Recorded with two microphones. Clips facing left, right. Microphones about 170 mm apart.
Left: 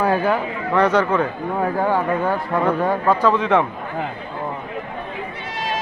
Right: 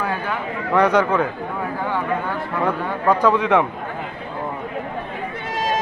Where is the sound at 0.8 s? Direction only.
10° right (ahead or behind).